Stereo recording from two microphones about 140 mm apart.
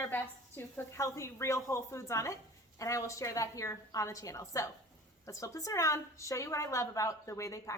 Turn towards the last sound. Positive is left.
turn(degrees=20)  # may be behind; listen again after turning